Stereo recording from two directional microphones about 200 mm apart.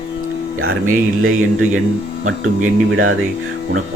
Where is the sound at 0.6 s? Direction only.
90° right.